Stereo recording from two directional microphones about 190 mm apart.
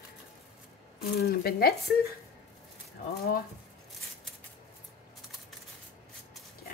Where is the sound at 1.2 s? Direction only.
55° left (ahead or behind).